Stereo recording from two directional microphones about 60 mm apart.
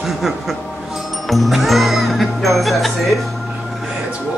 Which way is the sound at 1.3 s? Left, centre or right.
Centre.